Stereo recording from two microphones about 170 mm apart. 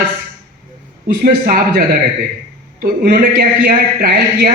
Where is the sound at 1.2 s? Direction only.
60° right (ahead or behind).